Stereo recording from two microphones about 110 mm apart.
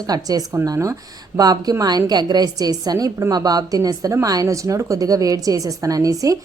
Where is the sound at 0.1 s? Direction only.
35° right (ahead or behind).